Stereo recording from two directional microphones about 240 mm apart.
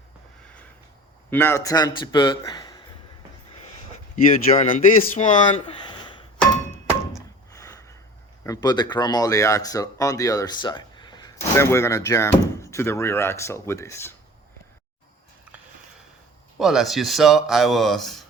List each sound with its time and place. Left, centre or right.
1.3 s speech: centre
4.7 s speech: left; by 6.5 s centre
7.5 s a sound: centre
8.4 s speech: centre
16.6 s speech: centre